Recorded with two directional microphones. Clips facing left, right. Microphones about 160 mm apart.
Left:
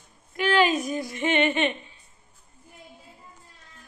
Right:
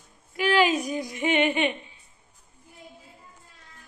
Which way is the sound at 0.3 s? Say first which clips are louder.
Even; 10° right (ahead or behind).